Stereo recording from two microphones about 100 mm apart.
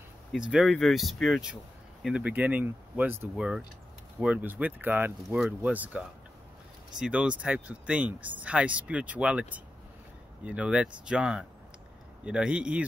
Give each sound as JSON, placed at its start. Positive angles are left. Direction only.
{"t": 0.3, "sound": "speech", "side_deg": -5}
{"t": 2.0, "sound": "speech", "side_deg": -10}
{"t": 3.3, "sound": "speech", "side_deg": -10}